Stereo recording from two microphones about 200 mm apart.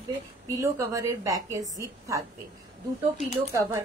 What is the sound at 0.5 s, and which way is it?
A woman's voice, 15° right (ahead or behind).